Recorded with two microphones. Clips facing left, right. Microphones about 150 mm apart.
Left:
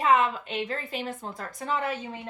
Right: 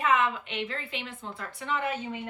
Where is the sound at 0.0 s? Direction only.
35° left (ahead or behind).